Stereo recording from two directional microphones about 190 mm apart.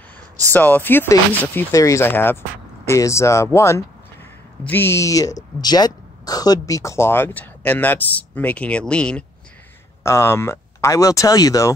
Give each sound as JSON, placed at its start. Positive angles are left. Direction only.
{"t": 0.5, "sound": "speech", "side_deg": 10}